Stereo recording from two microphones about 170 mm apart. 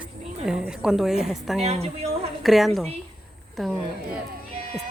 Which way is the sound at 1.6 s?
40° right (ahead or behind).